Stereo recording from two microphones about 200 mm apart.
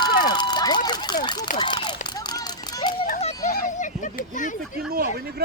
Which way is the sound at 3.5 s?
40° left (ahead or behind).